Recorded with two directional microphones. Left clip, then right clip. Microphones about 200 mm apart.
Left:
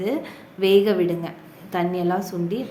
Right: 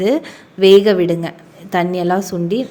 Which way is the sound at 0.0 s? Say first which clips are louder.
Right 9 dB; 35° right (ahead or behind).